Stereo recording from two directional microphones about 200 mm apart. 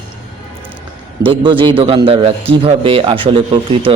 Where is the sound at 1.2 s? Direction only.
25° right (ahead or behind).